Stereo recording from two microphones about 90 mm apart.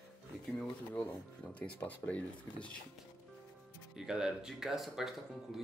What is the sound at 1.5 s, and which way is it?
Speech, 15° left (ahead or behind).